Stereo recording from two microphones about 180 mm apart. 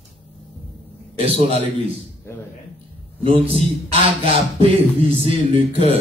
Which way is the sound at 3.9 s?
30° right (ahead or behind).